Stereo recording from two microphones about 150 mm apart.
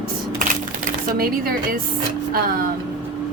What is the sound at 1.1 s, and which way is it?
Speech, 80° right.